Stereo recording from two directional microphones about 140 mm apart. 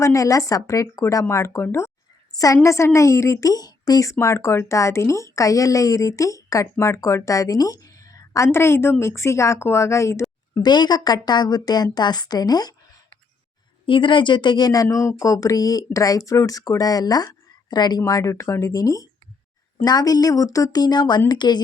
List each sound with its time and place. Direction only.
0.0 s a woman's voice: 20° left (ahead or behind)
10.7 s a woman's voice: 30° left (ahead or behind)
13.8 s a woman's voice: 35° left (ahead or behind)